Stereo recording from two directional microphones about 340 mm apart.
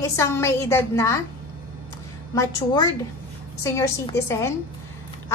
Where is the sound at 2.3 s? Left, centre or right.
Centre.